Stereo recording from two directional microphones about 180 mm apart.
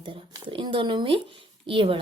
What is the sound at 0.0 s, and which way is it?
Speech, 30° right (ahead or behind).